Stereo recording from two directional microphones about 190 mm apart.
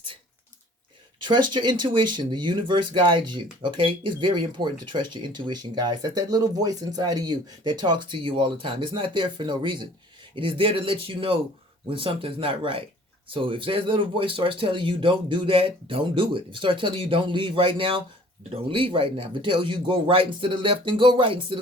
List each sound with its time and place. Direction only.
1.2 s speech: 25° right (ahead or behind)